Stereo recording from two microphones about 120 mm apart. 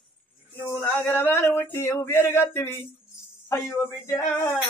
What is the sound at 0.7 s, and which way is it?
Speech, 15° left (ahead or behind).